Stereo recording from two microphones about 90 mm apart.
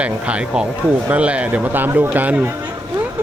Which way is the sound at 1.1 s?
15° right (ahead or behind).